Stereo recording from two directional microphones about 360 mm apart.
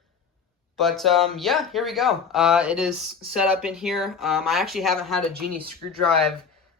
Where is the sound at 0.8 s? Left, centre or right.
Centre.